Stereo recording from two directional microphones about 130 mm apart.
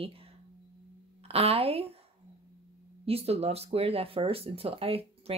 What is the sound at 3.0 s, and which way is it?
Speech, 50° right (ahead or behind).